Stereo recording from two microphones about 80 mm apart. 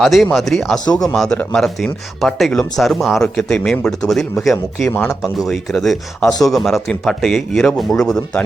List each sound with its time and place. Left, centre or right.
0.0 s speech: centre
0.9 s speech: left
1.1 s speech: centre